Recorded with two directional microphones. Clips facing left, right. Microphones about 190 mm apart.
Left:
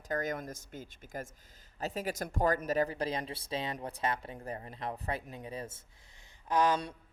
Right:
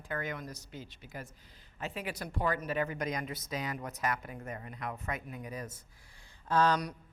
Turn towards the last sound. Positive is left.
turn(degrees=15)  # may be behind; listen again after turning